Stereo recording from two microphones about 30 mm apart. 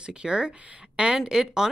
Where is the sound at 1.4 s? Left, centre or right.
Centre.